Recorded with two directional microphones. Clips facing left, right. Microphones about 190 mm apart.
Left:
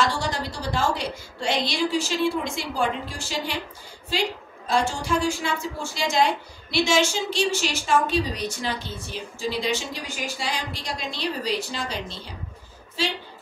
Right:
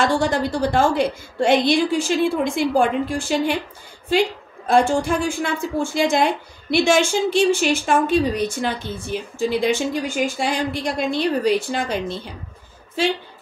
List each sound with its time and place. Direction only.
0.0 s a woman's voice: 55° right (ahead or behind)